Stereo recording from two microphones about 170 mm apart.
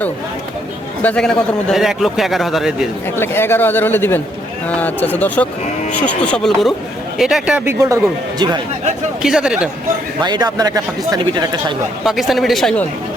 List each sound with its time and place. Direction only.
1.0 s speech: 5° left (ahead or behind)
3.2 s speech: 15° left (ahead or behind); by 8.6 s 25° right (ahead or behind)
9.2 s speech: 5° right (ahead or behind)
10.2 s speech: 25° right (ahead or behind)
12.0 s speech: centre (ahead or behind)